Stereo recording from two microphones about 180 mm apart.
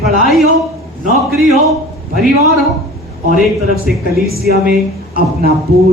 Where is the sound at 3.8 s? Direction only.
60° right (ahead or behind).